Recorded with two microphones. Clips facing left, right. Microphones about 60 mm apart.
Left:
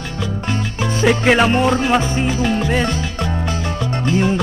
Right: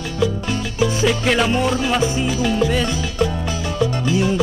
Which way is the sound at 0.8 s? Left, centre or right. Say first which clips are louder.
Left 2 dB; left.